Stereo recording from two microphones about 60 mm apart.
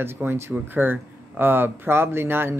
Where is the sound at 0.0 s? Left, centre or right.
Right.